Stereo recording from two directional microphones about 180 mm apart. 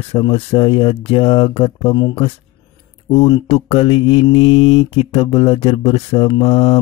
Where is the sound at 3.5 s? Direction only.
35° left (ahead or behind).